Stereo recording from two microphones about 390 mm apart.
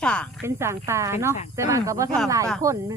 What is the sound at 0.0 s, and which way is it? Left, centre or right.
Speech, centre.